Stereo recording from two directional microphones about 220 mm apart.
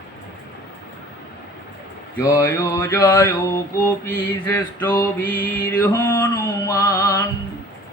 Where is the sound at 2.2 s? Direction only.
15° left (ahead or behind).